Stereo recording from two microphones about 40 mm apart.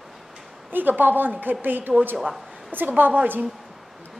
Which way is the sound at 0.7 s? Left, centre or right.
Right.